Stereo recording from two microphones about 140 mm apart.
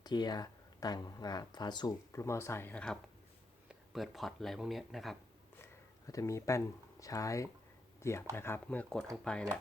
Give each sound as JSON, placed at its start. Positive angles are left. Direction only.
{"t": 0.0, "sound": "speech", "side_deg": 30}
{"t": 6.1, "sound": "speech", "side_deg": 25}